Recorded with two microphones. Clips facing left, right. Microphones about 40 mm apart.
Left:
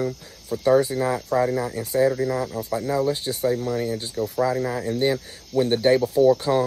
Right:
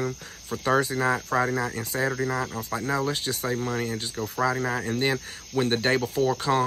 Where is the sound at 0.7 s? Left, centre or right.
Right.